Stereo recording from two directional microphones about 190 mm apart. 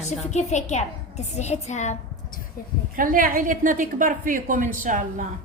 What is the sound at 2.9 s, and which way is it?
A woman's voice, 45° right (ahead or behind).